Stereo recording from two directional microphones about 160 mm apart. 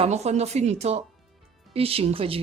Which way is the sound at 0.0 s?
45° right (ahead or behind).